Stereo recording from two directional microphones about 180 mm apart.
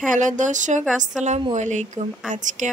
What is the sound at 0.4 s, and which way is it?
A woman's voice, 45° right (ahead or behind).